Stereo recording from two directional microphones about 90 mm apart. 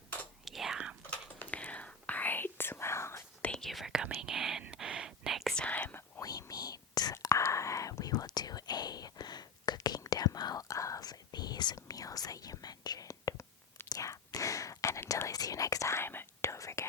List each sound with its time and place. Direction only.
0.4 s whispering: 5° right (ahead or behind)
1.1 s whispering: 15° left (ahead or behind); by 3.2 s 30° left (ahead or behind)
3.4 s whispering: 5° left (ahead or behind)
5.5 s whispering: 15° left (ahead or behind)
6.1 s whispering: 40° left (ahead or behind)